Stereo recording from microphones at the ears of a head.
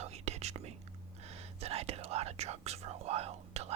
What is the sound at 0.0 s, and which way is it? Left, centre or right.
Whispering, right.